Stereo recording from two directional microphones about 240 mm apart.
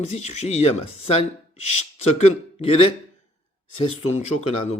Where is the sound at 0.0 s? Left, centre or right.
Left.